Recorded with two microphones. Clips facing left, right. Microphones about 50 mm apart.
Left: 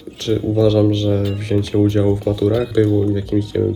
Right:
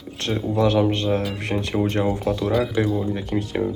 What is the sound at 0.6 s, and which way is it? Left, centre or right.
Speech, right.